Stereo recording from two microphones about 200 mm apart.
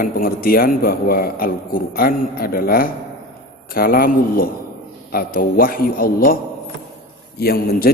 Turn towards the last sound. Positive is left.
turn(degrees=50)  # may be behind; listen again after turning